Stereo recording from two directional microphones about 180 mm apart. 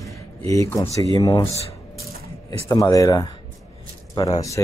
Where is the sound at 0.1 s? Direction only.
15° left (ahead or behind).